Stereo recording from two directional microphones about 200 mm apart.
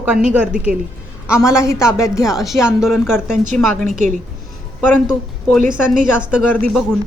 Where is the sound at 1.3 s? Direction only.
15° left (ahead or behind).